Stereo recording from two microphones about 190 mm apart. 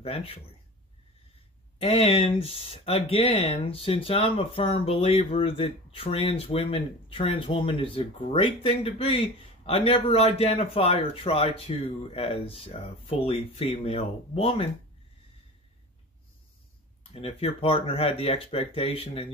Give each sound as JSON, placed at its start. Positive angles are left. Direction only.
{"t": 0.0, "sound": "speech", "side_deg": 30}
{"t": 1.8, "sound": "a man's voice", "side_deg": 30}
{"t": 17.1, "sound": "a man's voice", "side_deg": 30}